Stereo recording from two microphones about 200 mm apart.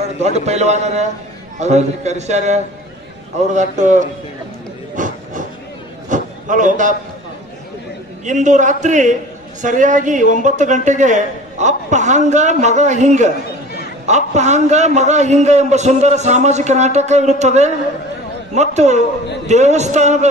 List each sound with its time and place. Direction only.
0.2 s a man's voice: 35° right (ahead or behind)
4.9 s a sound: 40° right (ahead or behind)
8.3 s a man's voice: 35° right (ahead or behind)